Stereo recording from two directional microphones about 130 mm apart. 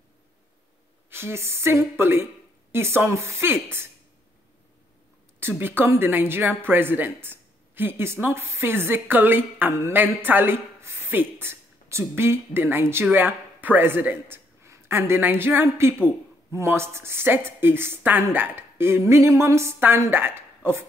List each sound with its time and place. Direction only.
1.1 s a woman's voice: 20° right (ahead or behind)
5.6 s a woman's voice: 15° right (ahead or behind)